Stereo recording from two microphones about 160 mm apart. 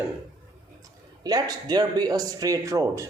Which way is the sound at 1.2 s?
25° right (ahead or behind).